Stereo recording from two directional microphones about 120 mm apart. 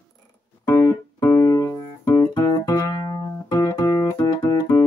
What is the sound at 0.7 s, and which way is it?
Music, 25° left (ahead or behind).